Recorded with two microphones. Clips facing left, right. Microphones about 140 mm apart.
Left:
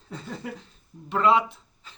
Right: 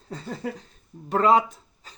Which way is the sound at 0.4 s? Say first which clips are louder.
Right 4 dB; 35° right (ahead or behind).